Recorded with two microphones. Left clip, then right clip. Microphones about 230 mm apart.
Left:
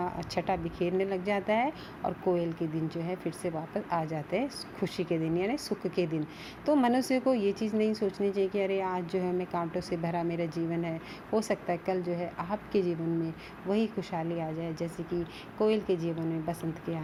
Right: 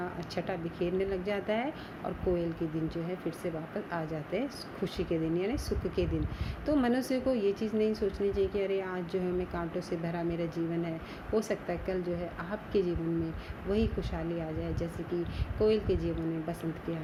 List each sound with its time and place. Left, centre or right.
0.0 s speech: left